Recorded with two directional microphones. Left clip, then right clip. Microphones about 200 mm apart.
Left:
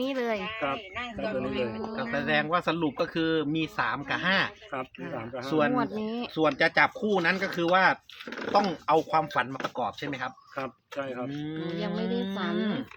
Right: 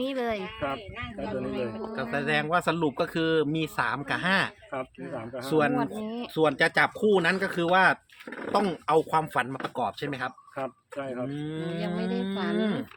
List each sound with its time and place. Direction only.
0.0 s speech: 5° left (ahead or behind)
2.0 s speech: 55° right (ahead or behind)
4.7 s speech: centre (ahead or behind)
5.5 s speech: 55° right (ahead or behind)
5.7 s speech: 15° left (ahead or behind)
6.3 s speech: 55° right (ahead or behind)
10.6 s speech: centre (ahead or behind)
11.3 s speech: 50° right (ahead or behind)
11.8 s speech: 10° left (ahead or behind)
12.5 s speech: 50° right (ahead or behind)